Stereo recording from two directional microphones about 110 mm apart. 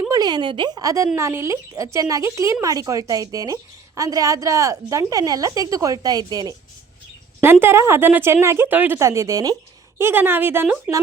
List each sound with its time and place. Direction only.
0.1 s speech: 40° right (ahead or behind)
7.4 s a woman's voice: 20° right (ahead or behind)
9.0 s a woman's voice: 25° right (ahead or behind)
10.0 s a woman's voice: 20° right (ahead or behind)